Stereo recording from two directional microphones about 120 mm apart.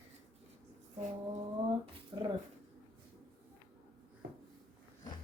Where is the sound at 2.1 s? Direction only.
35° right (ahead or behind).